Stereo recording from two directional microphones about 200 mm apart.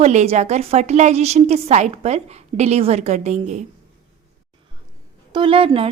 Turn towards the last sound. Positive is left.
turn(degrees=-30)  # may be behind; listen again after turning